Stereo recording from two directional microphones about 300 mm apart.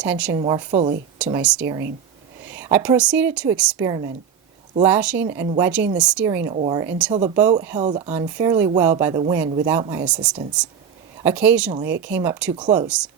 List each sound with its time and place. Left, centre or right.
0.0 s speech: centre
0.3 s a woman's voice: centre
1.2 s a woman's voice: centre
11.2 s a woman's voice: centre